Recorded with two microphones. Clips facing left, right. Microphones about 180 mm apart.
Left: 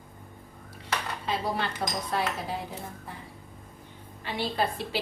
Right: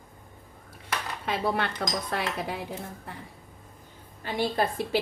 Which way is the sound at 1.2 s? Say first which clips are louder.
Right 4 dB; 60° right (ahead or behind).